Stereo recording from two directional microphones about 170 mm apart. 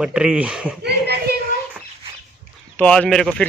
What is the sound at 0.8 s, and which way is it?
Speech, 75° right (ahead or behind).